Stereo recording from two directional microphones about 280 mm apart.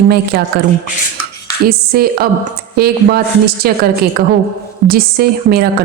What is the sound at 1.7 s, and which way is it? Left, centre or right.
Speech, right.